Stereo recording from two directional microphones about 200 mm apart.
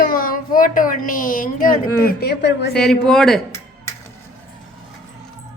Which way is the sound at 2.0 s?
50° left (ahead or behind).